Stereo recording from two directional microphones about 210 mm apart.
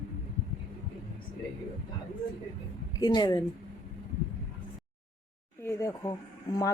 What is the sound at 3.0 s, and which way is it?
Speech, 20° left (ahead or behind).